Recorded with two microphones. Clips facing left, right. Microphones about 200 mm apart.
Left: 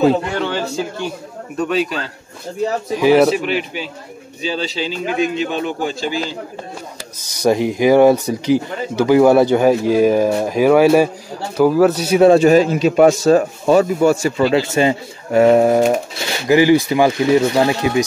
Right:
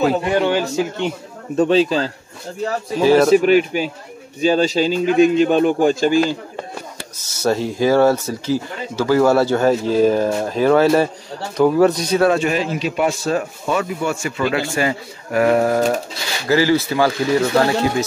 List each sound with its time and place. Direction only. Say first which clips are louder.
0.2 s a man's voice: right 4 dB; 15° right (ahead or behind)
2.6 s speech: left 1 dB; 15° left (ahead or behind)
3.4 s a man's voice: right 7 dB; 45° right (ahead or behind)
7.2 s speech: left 4 dB; 15° left (ahead or behind)
12.4 s speech: left 8 dB; 40° left (ahead or behind)
14.5 s speech: left 5 dB; 20° left (ahead or behind)